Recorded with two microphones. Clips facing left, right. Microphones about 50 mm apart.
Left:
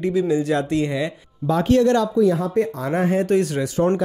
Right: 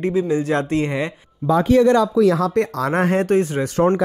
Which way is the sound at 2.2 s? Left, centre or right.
Right.